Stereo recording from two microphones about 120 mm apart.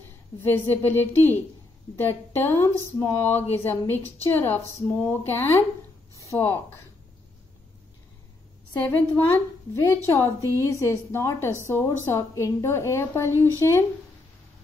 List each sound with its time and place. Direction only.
0.4 s a woman's voice: 15° left (ahead or behind)
8.7 s a woman's voice: 15° left (ahead or behind)